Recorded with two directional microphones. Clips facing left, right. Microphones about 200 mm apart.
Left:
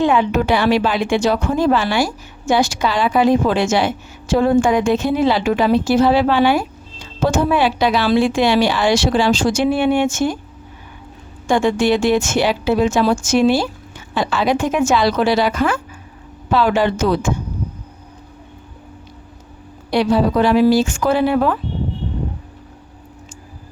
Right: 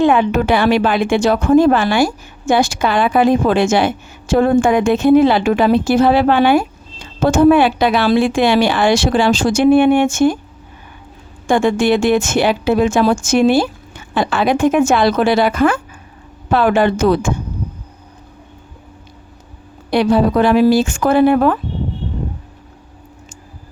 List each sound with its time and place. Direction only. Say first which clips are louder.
0.0 s a woman's voice: right 3 dB; 55° right (ahead or behind)
11.4 s a woman's voice: right 2 dB; 50° right (ahead or behind)
19.9 s a woman's voice: right 2 dB; 55° right (ahead or behind)